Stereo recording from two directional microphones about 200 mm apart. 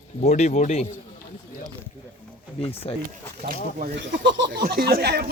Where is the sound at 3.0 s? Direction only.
45° right (ahead or behind).